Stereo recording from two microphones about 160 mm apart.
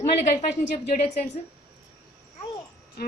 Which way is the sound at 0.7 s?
45° left (ahead or behind).